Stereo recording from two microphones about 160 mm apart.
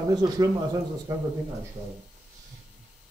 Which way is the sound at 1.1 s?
20° right (ahead or behind).